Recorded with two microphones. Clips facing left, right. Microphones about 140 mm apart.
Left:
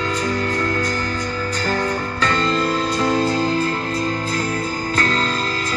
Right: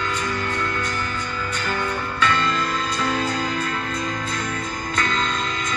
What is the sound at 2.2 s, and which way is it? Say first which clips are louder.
Music: left 1 dB; 35° left (ahead or behind).